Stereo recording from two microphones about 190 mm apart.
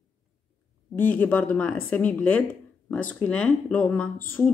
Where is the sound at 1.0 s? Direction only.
10° left (ahead or behind).